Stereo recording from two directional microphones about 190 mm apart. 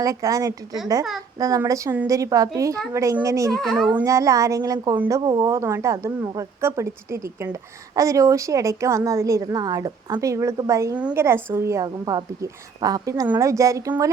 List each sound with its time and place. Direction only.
0.0 s a woman's voice: 15° right (ahead or behind)
3.6 s a child's voice: centre (ahead or behind)
3.9 s a woman's voice: 15° right (ahead or behind)